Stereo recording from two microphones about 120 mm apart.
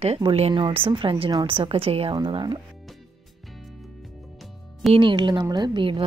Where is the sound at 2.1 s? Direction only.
40° right (ahead or behind).